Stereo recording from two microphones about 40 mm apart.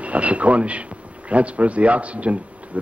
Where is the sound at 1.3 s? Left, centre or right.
Right.